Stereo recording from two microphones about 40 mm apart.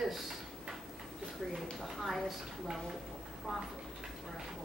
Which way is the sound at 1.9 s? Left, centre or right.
Centre.